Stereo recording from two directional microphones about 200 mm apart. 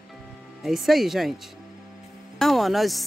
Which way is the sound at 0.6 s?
Centre (ahead or behind).